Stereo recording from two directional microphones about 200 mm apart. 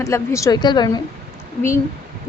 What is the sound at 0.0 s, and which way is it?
Speech, 15° left (ahead or behind).